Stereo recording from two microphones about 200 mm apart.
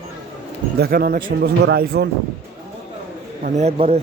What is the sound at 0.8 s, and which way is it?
Speech, 50° right (ahead or behind).